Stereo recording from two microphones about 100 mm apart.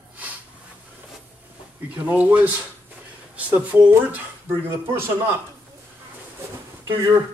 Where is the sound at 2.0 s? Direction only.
15° right (ahead or behind).